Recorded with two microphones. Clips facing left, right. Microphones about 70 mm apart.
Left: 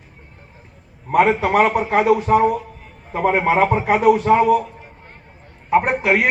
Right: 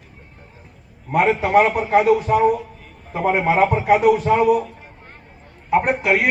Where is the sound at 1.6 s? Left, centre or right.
Left.